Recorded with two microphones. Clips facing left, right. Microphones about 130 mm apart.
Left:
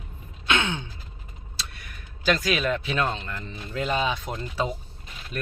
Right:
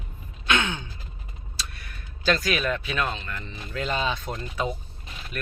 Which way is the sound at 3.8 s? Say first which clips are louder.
Left 2 dB; 15° left (ahead or behind).